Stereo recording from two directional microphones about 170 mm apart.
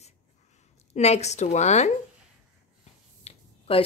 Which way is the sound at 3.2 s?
35° left (ahead or behind).